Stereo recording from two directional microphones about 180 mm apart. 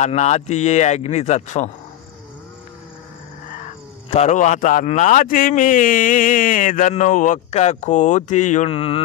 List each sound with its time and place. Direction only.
0.0 s speech: 40° left (ahead or behind)
4.1 s a man's voice: 40° left (ahead or behind)